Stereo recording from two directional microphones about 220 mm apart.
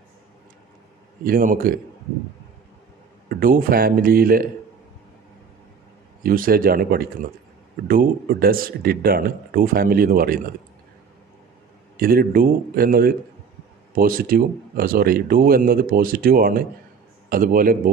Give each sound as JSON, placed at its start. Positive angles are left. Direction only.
{"t": 1.2, "sound": "speech", "side_deg": -40}
{"t": 3.3, "sound": "speech", "side_deg": -40}
{"t": 6.2, "sound": "speech", "side_deg": -40}
{"t": 12.0, "sound": "speech", "side_deg": -45}